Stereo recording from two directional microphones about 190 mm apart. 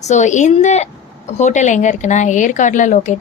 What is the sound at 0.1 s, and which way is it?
A woman's voice, 40° left (ahead or behind).